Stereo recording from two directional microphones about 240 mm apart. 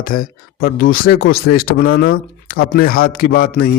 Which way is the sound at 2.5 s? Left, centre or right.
Left.